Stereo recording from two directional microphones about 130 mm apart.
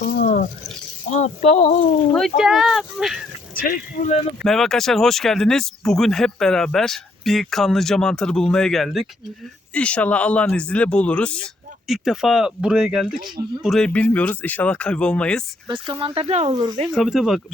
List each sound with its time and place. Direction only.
0.2 s a sound: 80° left
1.1 s speech: 60° left (ahead or behind)
2.4 s a sound: centre (ahead or behind)
3.5 s speech: 90° left
4.4 s speech: 5° left (ahead or behind)
11.9 s speech: 5° right (ahead or behind)
15.6 s speech: 40° right (ahead or behind)
16.5 s speech: 30° right (ahead or behind)
16.9 s speech: centre (ahead or behind)